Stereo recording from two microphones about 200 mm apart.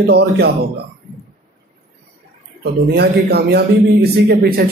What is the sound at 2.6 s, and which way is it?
A man's voice, 55° right (ahead or behind).